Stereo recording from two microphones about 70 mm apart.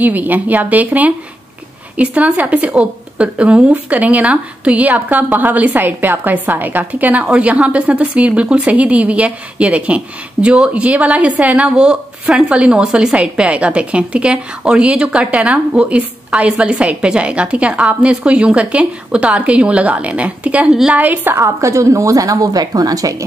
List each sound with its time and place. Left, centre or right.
0.0 s a woman's voice: right
21.4 s a woman's voice: right